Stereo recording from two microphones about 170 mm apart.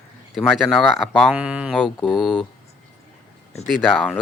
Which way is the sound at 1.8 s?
5° left (ahead or behind).